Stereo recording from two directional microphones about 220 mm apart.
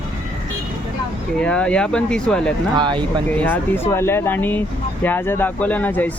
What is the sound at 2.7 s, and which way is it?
Speech, 20° right (ahead or behind).